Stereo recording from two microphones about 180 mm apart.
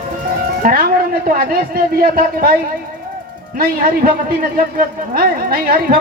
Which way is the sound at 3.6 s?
55° right (ahead or behind).